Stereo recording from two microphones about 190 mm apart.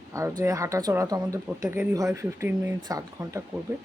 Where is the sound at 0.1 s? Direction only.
15° right (ahead or behind).